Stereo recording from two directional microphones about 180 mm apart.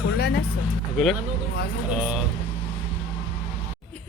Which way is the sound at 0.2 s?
65° left (ahead or behind).